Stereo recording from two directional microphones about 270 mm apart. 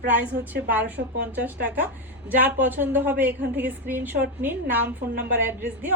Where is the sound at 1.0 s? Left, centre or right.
Right.